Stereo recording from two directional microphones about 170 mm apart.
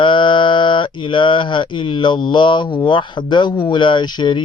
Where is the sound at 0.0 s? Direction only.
30° left (ahead or behind).